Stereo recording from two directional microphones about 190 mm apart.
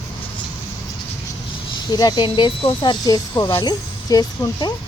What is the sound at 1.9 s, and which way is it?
Speech, 20° left (ahead or behind).